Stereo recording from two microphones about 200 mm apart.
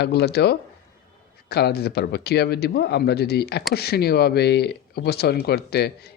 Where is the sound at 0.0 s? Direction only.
55° left (ahead or behind).